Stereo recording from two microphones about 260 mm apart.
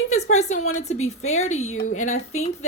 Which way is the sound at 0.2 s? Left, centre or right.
Left.